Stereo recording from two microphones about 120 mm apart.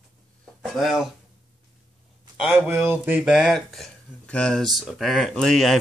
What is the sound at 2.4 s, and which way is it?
Speech, 10° right (ahead or behind).